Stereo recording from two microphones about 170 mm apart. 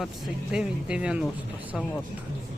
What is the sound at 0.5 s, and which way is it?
Speech, 5° right (ahead or behind).